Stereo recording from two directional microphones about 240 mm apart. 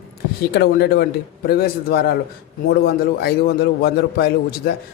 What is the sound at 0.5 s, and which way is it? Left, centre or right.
A man's voice, left.